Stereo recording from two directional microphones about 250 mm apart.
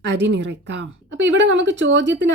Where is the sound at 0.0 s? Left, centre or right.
Right.